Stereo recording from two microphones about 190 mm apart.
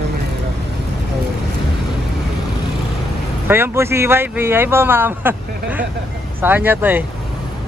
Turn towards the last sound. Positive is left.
turn(degrees=-10)  # may be behind; listen again after turning